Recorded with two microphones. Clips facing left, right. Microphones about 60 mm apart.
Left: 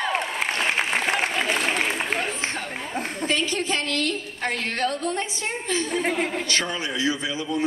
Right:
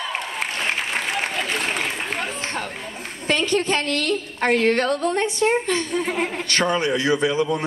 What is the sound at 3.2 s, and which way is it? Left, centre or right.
A woman's voice, right.